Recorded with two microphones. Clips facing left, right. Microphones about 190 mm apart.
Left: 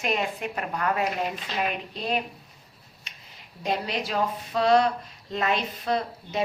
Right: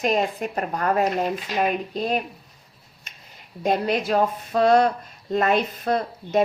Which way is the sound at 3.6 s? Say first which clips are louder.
Right 6 dB; 50° right (ahead or behind).